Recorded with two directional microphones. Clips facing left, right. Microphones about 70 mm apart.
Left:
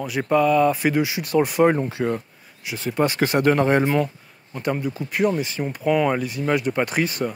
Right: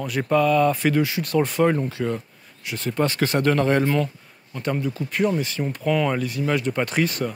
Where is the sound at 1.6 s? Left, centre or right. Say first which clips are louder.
Left 2 dB; left.